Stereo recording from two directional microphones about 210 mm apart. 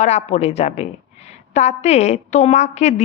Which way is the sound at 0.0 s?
30° left (ahead or behind).